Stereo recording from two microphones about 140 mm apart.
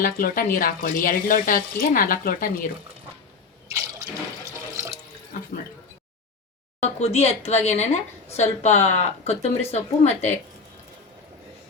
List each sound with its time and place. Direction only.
0.0 s speech: 85° left
4.7 s water: 20° right (ahead or behind)
6.8 s speech: 50° left (ahead or behind)